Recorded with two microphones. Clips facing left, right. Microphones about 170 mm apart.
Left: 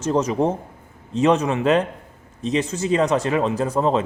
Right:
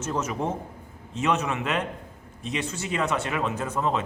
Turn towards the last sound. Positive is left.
turn(degrees=35)  # may be behind; listen again after turning